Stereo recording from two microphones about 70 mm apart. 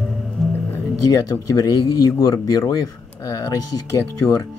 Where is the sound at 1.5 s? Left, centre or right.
Left.